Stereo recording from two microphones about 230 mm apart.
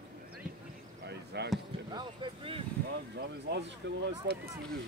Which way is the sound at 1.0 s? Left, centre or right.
Right.